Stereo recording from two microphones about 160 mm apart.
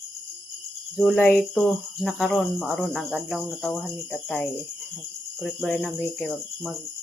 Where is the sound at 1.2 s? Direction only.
15° left (ahead or behind).